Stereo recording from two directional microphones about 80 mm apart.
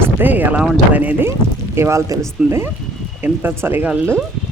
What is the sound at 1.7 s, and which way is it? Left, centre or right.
Speech, right.